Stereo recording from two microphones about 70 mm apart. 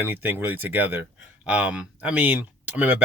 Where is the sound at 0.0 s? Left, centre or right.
Right.